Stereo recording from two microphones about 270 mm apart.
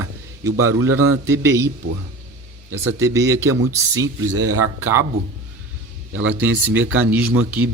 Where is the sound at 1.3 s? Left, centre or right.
Centre.